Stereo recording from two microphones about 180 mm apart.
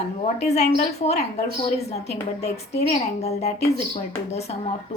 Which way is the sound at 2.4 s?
35° left (ahead or behind).